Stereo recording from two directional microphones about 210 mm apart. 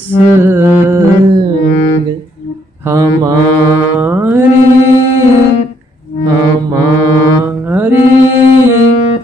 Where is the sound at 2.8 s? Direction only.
15° right (ahead or behind).